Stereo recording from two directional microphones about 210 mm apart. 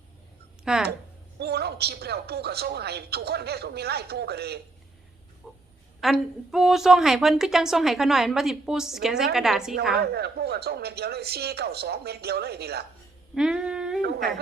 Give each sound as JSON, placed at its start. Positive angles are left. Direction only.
{"t": 0.6, "sound": "speech", "side_deg": -5}
{"t": 1.4, "sound": "speech", "side_deg": -50}
{"t": 5.4, "sound": "a sound", "side_deg": 0}
{"t": 6.0, "sound": "a woman's voice", "side_deg": 0}
{"t": 10.0, "sound": "speech", "side_deg": -50}
{"t": 13.3, "sound": "humming", "side_deg": -5}